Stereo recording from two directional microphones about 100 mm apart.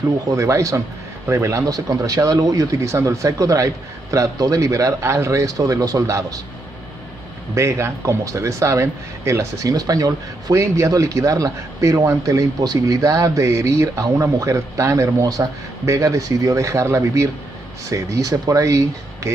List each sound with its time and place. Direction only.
0.3 s speech: 30° right (ahead or behind)
7.5 s speech: 30° right (ahead or behind)